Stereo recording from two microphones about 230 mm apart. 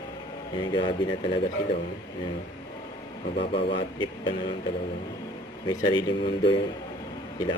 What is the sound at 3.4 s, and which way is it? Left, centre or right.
Speech, left.